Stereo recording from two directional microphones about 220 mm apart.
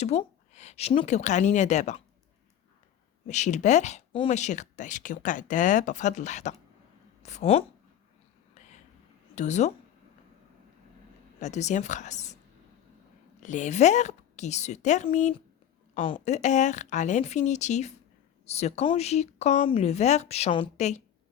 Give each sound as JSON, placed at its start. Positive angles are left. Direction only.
{"t": 0.0, "sound": "speech", "side_deg": 30}
{"t": 3.2, "sound": "speech", "side_deg": 30}
{"t": 9.3, "sound": "speech", "side_deg": 30}
{"t": 11.3, "sound": "speech", "side_deg": 30}
{"t": 13.4, "sound": "speech", "side_deg": 35}